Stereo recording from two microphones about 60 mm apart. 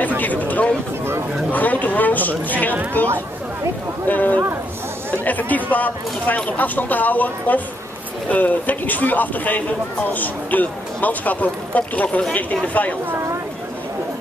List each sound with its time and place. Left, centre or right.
0.2 s a sound: left
1.5 s a man's voice: left
13.1 s speech: right